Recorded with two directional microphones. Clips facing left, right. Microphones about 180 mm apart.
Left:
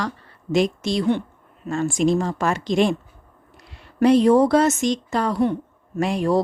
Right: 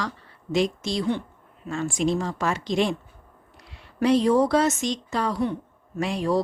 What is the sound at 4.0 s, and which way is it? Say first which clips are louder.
A woman's voice: left 5 dB; 50° left (ahead or behind).